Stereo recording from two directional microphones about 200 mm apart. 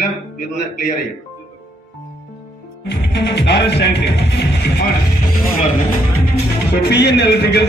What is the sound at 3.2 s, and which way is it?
Speech, 60° left (ahead or behind).